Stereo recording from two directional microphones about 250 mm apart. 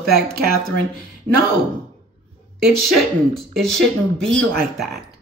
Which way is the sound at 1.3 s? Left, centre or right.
Right.